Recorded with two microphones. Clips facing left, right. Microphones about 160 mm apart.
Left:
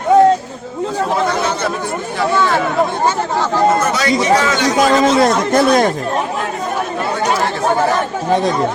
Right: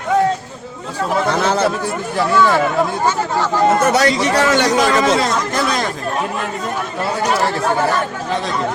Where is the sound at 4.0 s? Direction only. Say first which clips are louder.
Left 1 dB; 65° right (ahead or behind).